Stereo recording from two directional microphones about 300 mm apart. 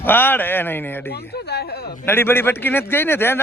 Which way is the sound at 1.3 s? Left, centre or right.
Left.